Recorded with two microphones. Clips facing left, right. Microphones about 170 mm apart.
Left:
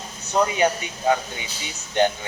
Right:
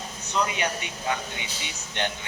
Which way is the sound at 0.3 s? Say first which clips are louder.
Left 7 dB; 45° left (ahead or behind).